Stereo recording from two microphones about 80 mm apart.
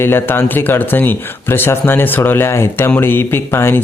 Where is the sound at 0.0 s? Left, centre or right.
Left.